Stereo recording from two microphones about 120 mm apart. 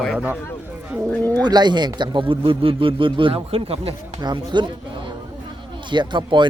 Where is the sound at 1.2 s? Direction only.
15° left (ahead or behind).